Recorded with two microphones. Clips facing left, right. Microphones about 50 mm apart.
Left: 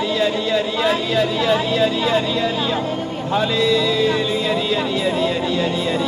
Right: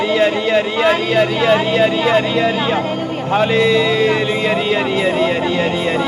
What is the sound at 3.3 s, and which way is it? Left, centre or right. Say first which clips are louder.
Speech: right 4 dB; right.